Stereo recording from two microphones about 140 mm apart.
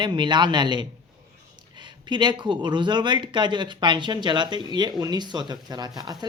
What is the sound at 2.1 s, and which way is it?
Speech, 35° right (ahead or behind).